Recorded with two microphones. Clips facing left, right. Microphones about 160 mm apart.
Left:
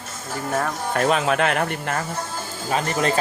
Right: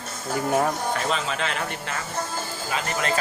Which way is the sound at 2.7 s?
40° left (ahead or behind).